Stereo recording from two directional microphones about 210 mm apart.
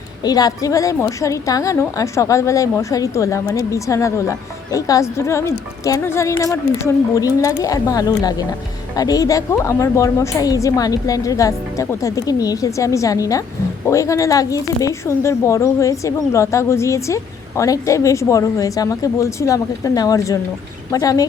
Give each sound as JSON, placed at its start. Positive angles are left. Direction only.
{"t": 0.3, "sound": "a woman's voice", "side_deg": 20}